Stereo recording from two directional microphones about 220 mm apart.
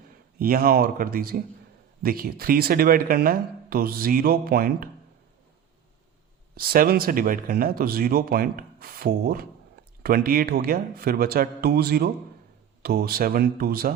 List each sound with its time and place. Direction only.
0.3 s speech: 40° right (ahead or behind)
6.6 s speech: 40° right (ahead or behind)